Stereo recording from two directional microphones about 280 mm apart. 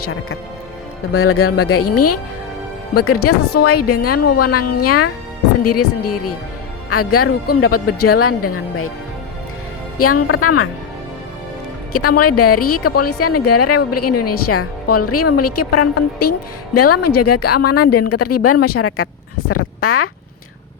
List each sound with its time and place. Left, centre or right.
1.1 s speech: left
10.0 s speech: left
11.9 s speech: left